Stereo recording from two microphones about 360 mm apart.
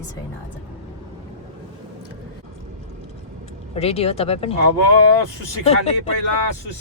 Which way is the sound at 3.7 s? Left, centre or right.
Centre.